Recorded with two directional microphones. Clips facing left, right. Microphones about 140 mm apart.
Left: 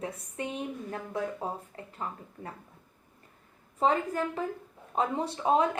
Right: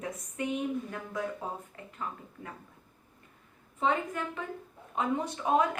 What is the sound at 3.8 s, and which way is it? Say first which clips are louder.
A woman's voice: left 3 dB; 35° left (ahead or behind).